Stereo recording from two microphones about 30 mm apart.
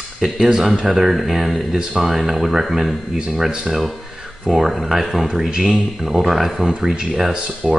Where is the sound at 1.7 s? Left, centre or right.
Centre.